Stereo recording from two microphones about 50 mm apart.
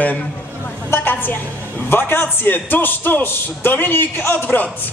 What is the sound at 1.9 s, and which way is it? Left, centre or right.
A man's voice, left.